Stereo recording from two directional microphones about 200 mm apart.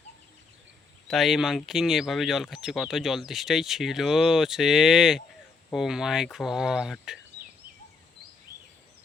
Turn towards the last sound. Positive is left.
turn(degrees=0)  # may be behind; listen again after turning